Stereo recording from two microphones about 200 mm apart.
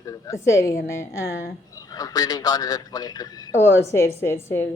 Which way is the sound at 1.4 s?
15° left (ahead or behind).